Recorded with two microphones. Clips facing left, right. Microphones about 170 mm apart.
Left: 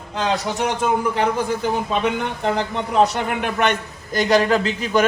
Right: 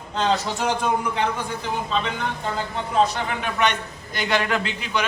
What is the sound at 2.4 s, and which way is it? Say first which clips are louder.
A man's voice: left 6 dB; 70° left (ahead or behind).